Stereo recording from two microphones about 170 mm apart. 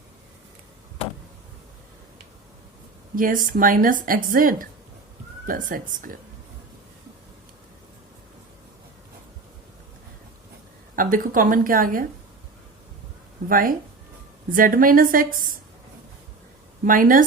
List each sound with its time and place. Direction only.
3.2 s a woman's voice: 55° right (ahead or behind)
10.9 s a woman's voice: 55° right (ahead or behind)
13.5 s a woman's voice: 55° right (ahead or behind)
16.8 s a woman's voice: 55° right (ahead or behind)